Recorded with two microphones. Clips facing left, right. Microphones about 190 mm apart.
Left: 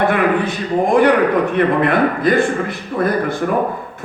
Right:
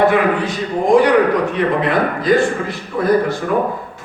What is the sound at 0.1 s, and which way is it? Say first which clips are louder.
A man's voice: even; 55° left (ahead or behind).